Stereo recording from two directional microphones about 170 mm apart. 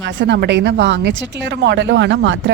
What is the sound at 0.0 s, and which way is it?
A woman's voice, 90° right.